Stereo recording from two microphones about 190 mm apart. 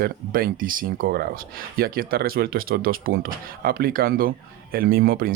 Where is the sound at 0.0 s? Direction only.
50° right (ahead or behind).